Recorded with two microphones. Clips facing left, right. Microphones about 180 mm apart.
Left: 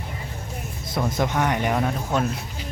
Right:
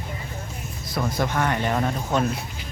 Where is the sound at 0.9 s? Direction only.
20° left (ahead or behind); by 2.4 s 5° left (ahead or behind).